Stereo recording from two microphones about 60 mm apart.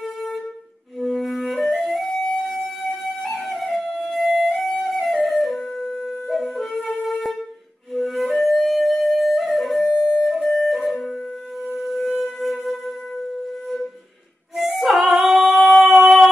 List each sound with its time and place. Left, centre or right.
0.9 s music: centre
3.4 s flute: centre
4.1 s music: centre
5.0 s flute: centre
8.4 s music: centre
11.7 s shofar: centre
12.2 s wind instrument: centre
14.5 s music: centre
15.0 s howl: right
15.6 s a sound: centre